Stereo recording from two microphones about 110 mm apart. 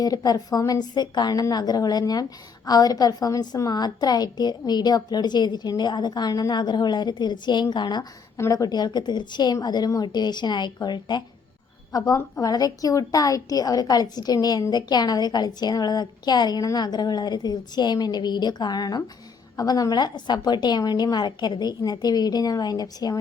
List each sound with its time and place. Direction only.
0.0 s a woman's voice: 35° left (ahead or behind)
8.4 s a woman's voice: 30° left (ahead or behind)